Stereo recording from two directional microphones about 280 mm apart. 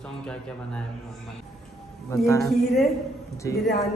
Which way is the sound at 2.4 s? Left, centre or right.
Centre.